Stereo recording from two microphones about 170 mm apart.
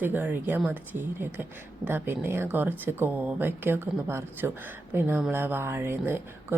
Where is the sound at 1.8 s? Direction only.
10° right (ahead or behind).